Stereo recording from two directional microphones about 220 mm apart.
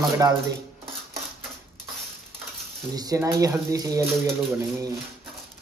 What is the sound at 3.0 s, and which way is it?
A man's voice, 15° right (ahead or behind).